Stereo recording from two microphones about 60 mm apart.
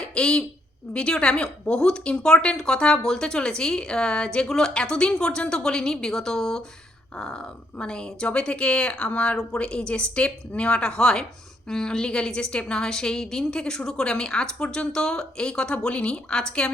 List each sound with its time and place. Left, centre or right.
0.1 s a woman's voice: centre